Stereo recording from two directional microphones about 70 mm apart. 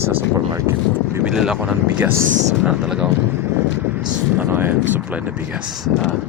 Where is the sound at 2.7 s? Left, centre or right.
Centre.